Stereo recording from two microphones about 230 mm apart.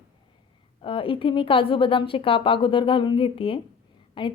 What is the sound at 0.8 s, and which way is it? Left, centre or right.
A woman's voice, left.